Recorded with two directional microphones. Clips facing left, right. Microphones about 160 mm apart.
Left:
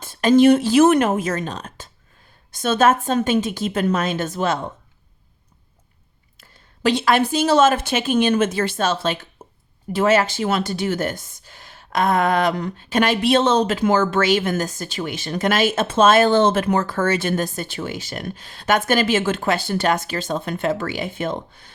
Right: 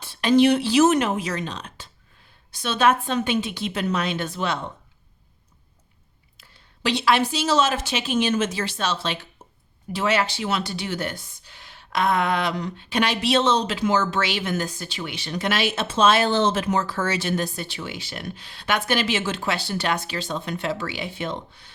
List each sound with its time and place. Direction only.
0.0 s speech: 45° left (ahead or behind)
6.3 s speech: 45° left (ahead or behind)
9.4 s a sound: 50° left (ahead or behind)
9.9 s speech: 45° left (ahead or behind)